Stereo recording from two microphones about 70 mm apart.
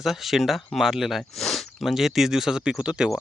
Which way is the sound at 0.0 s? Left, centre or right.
Centre.